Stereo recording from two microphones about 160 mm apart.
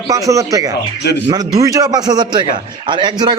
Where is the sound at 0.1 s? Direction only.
20° right (ahead or behind).